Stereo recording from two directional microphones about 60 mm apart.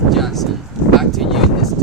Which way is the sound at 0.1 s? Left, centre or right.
Centre.